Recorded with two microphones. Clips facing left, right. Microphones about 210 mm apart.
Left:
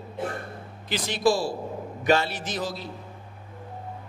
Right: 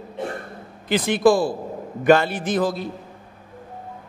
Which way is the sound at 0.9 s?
55° right (ahead or behind).